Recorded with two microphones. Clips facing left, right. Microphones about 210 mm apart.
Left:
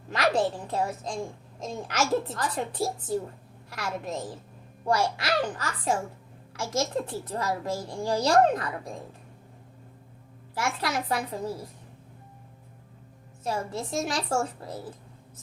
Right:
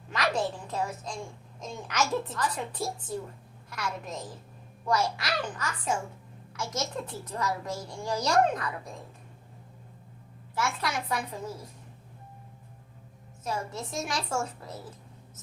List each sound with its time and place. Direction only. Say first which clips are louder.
0.1 s a child's voice: left 4 dB; 35° left (ahead or behind)
10.6 s a child's voice: left 2 dB; 30° left (ahead or behind)
13.4 s a child's voice: left 3 dB; 30° left (ahead or behind)